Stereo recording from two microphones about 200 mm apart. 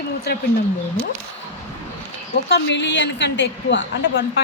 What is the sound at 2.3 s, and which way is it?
A woman's voice, 60° left (ahead or behind).